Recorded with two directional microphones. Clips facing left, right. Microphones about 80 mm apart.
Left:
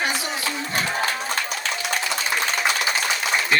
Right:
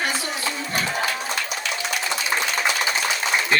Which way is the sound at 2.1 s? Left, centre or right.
Right.